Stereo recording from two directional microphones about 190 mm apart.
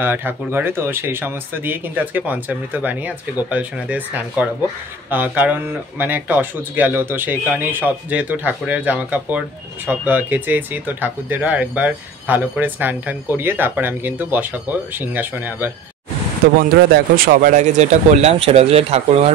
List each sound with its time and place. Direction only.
0.0 s speech: 10° right (ahead or behind)
16.4 s speech: 55° right (ahead or behind); by 19.3 s 35° right (ahead or behind)